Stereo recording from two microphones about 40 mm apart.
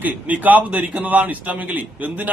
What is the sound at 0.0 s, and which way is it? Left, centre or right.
A man's voice, right.